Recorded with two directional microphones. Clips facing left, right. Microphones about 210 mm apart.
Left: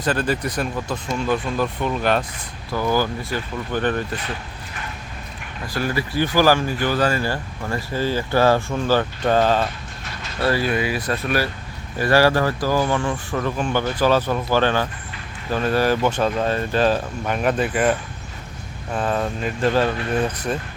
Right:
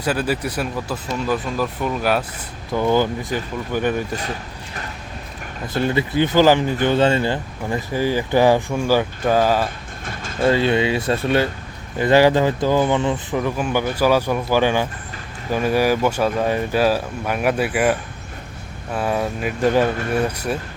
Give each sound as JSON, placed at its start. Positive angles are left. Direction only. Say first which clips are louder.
{"t": 0.0, "sound": "speech", "louder": "even", "side_deg": -10}
{"t": 2.7, "sound": "speech", "louder": "right 3 dB", "side_deg": -20}
{"t": 4.1, "sound": "speech", "louder": "right 2 dB", "side_deg": -40}
{"t": 5.6, "sound": "speech", "louder": "right 4 dB", "side_deg": -20}
{"t": 9.6, "sound": "vehicle", "louder": "right 2 dB", "side_deg": -50}
{"t": 10.4, "sound": "speech", "louder": "right 4 dB", "side_deg": -25}
{"t": 18.9, "sound": "speech", "louder": "right 1 dB", "side_deg": -10}